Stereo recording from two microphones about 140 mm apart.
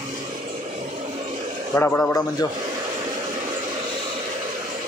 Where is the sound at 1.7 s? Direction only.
15° left (ahead or behind).